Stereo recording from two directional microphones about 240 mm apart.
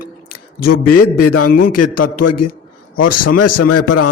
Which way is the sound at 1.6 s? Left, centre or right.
Left.